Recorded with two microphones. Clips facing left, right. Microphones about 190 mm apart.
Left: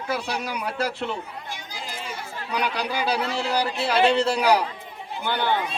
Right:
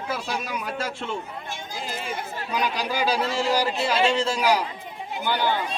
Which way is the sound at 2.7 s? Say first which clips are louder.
Right 1 dB; 65° left (ahead or behind).